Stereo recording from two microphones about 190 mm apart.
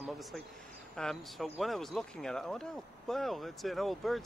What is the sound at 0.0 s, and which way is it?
Speech, centre (ahead or behind).